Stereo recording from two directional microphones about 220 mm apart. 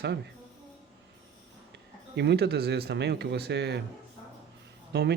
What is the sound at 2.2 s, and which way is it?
Speech, 50° right (ahead or behind).